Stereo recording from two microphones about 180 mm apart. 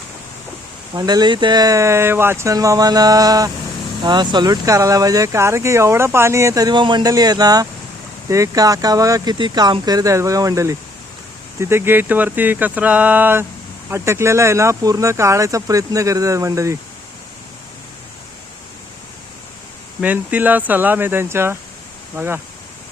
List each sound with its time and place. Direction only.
0.9 s speech: 20° right (ahead or behind)
20.0 s speech: 10° right (ahead or behind)